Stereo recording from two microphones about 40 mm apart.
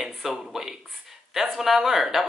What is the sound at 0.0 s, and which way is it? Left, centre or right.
Speech, centre.